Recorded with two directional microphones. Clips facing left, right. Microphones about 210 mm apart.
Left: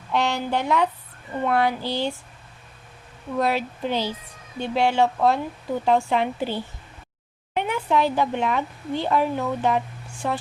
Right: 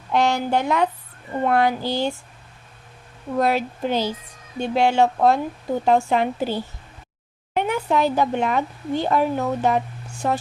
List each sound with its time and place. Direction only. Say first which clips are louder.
0.1 s a woman's voice: right 4 dB; 45° right (ahead or behind)
3.3 s a woman's voice: right 3 dB; 45° right (ahead or behind)